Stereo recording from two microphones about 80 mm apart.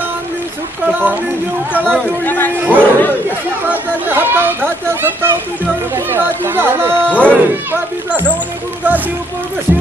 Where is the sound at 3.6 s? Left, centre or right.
Right.